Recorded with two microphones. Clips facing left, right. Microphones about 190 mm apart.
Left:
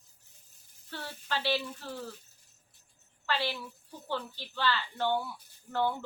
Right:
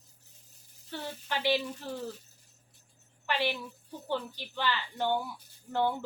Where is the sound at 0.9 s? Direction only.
15° right (ahead or behind).